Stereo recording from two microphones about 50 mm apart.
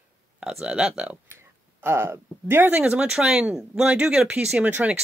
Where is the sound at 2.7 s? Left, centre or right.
Right.